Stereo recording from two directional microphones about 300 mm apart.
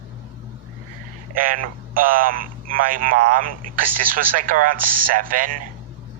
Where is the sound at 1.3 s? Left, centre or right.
Right.